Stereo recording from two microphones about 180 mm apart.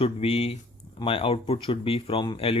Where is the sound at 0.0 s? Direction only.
30° left (ahead or behind).